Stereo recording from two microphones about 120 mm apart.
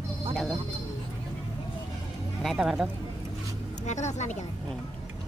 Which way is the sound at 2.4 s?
Centre (ahead or behind).